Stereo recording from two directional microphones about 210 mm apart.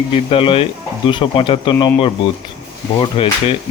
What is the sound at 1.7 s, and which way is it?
Speech, 10° left (ahead or behind).